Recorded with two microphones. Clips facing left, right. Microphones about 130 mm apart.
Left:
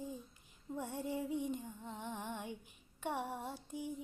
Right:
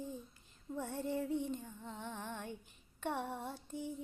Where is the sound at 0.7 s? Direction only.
10° left (ahead or behind).